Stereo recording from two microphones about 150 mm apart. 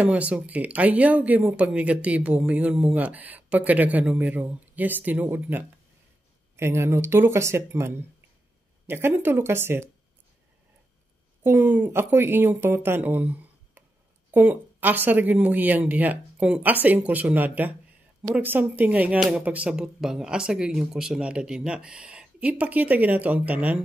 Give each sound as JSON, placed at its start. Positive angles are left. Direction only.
{"t": 0.0, "sound": "speech", "side_deg": -10}
{"t": 11.4, "sound": "speech", "side_deg": -10}